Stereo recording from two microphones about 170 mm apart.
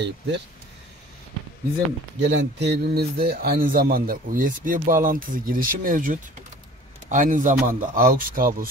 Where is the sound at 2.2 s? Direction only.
90° right.